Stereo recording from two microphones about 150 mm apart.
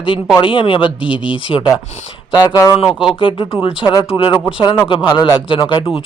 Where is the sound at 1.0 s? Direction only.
5° right (ahead or behind).